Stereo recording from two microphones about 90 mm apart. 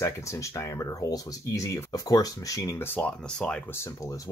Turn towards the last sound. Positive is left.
turn(degrees=30)  # may be behind; listen again after turning